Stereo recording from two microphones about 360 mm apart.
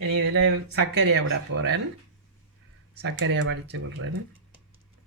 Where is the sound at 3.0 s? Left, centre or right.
Right.